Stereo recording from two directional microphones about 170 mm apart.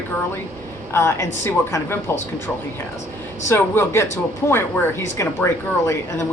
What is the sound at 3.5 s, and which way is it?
A woman's voice, 15° left (ahead or behind).